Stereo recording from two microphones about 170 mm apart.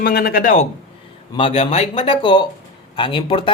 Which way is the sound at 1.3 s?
35° left (ahead or behind).